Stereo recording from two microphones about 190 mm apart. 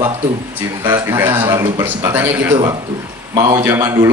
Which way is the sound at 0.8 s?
15° right (ahead or behind).